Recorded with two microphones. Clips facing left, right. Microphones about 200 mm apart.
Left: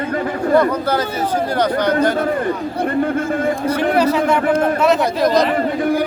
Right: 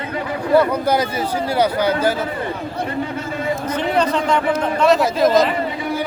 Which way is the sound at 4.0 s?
10° left (ahead or behind).